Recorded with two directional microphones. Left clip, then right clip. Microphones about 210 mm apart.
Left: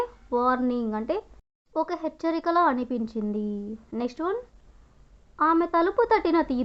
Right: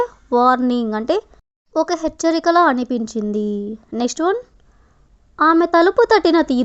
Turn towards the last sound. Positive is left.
turn(degrees=-35)  # may be behind; listen again after turning